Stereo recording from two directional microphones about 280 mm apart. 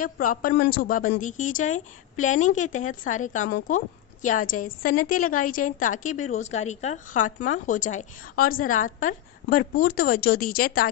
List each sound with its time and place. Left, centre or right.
0.0 s a woman's voice: left